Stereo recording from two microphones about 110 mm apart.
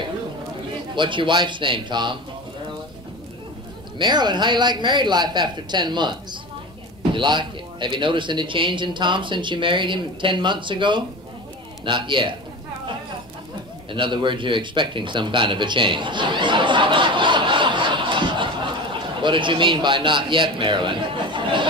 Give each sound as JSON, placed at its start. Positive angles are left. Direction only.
{"t": 0.9, "sound": "speech", "side_deg": -50}
{"t": 4.0, "sound": "speech", "side_deg": -40}
{"t": 7.2, "sound": "speech", "side_deg": -45}
{"t": 13.9, "sound": "a sound", "side_deg": -50}
{"t": 19.2, "sound": "a man's voice", "side_deg": -50}